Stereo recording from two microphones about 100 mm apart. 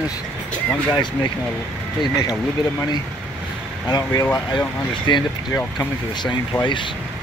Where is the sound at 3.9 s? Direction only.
40° left (ahead or behind).